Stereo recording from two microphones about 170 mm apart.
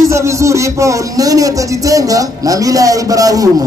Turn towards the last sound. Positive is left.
turn(degrees=-20)  # may be behind; listen again after turning